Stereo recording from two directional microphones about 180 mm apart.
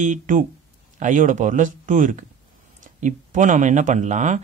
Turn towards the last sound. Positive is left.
turn(degrees=-40)  # may be behind; listen again after turning